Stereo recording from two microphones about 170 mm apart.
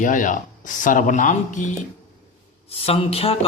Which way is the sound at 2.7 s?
35° left (ahead or behind).